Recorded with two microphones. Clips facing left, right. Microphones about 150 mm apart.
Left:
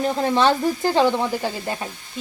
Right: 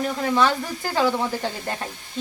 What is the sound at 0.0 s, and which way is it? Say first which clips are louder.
Speech: left 3 dB; 30° left (ahead or behind).